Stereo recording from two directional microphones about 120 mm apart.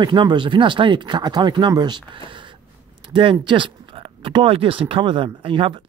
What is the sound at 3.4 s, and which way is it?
Speech, 45° right (ahead or behind).